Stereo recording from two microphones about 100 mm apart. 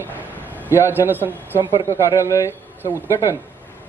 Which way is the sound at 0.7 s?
20° right (ahead or behind).